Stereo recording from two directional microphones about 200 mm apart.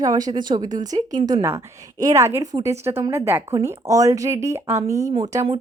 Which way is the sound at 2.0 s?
15° right (ahead or behind).